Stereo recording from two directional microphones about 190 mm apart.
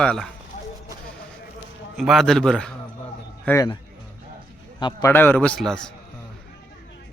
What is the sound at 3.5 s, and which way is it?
A man's voice, 20° left (ahead or behind).